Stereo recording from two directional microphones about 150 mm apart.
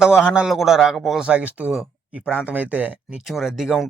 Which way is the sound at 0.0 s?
5° right (ahead or behind).